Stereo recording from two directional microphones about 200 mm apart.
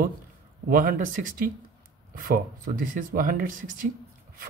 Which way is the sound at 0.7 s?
45° right (ahead or behind).